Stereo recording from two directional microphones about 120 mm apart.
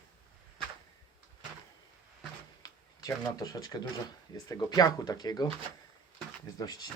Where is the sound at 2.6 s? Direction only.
30° left (ahead or behind).